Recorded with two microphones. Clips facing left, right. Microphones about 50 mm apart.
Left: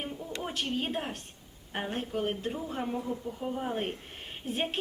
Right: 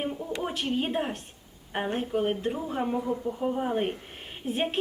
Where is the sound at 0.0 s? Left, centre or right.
Centre.